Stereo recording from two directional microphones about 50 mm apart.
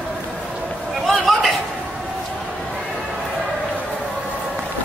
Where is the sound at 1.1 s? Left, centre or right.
Centre.